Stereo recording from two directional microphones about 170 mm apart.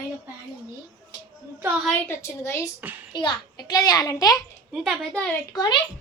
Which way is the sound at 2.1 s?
15° left (ahead or behind).